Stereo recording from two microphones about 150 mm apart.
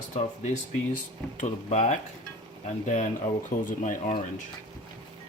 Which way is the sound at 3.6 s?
60° left (ahead or behind).